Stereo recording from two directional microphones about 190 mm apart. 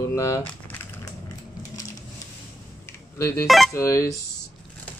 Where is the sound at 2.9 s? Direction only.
15° left (ahead or behind).